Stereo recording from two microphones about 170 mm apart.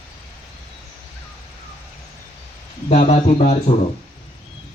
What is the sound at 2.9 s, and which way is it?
Speech, 40° left (ahead or behind).